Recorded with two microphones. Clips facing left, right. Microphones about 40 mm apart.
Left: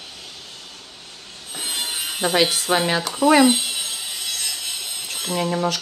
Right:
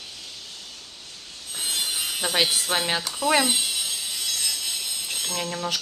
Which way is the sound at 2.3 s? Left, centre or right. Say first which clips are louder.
Left 5 dB; centre.